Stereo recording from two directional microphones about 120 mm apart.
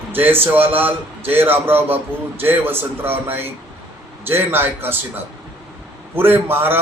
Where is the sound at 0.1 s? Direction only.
15° right (ahead or behind).